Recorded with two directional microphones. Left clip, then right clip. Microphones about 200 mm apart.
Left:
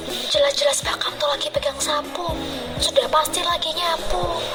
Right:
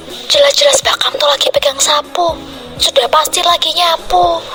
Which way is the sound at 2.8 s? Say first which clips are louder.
Right 8 dB; 40° right (ahead or behind).